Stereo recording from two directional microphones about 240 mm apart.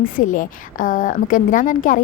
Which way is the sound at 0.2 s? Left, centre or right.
Left.